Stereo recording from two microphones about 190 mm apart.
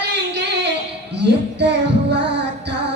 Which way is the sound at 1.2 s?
65° right (ahead or behind).